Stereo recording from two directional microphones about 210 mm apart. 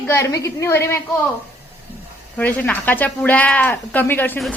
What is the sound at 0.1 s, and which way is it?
Speech, 15° left (ahead or behind).